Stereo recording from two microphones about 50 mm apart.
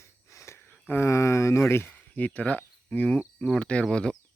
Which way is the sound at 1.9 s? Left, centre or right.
Left.